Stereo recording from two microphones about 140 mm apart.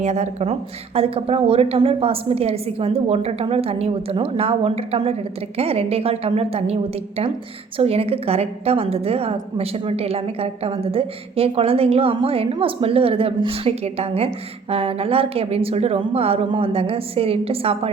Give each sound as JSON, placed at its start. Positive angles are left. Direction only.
{"t": 0.0, "sound": "a woman's voice", "side_deg": -55}